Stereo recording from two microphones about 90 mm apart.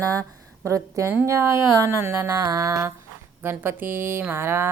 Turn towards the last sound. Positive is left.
turn(degrees=-30)  # may be behind; listen again after turning